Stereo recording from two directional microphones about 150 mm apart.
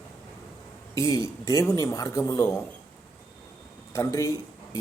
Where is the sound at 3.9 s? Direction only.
20° left (ahead or behind).